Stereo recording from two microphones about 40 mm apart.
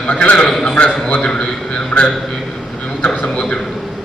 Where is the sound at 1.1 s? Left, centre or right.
Left.